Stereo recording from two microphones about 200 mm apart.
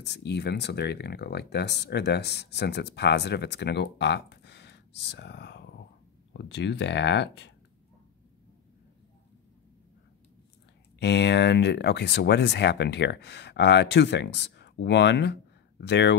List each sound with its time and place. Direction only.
0.0 s speech: 60° left (ahead or behind)
11.0 s speech: 60° left (ahead or behind)